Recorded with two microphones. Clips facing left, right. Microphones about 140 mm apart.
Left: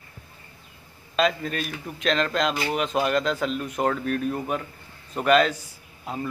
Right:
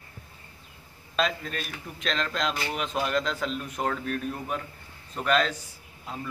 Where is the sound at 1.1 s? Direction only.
5° left (ahead or behind).